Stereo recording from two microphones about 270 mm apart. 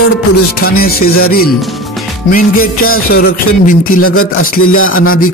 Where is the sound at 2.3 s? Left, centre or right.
Left.